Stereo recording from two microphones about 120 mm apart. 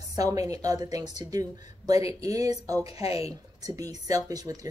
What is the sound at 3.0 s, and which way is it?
Speech, 55° left (ahead or behind).